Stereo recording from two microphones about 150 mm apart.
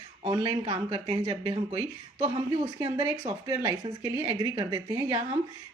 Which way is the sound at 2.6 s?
30° right (ahead or behind).